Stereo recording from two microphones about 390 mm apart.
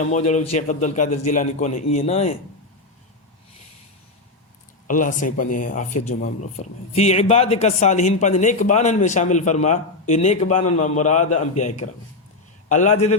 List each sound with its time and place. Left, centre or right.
0.0 s a man's voice: centre
4.9 s a man's voice: centre
10.5 s a man's voice: left
10.8 s a man's voice: centre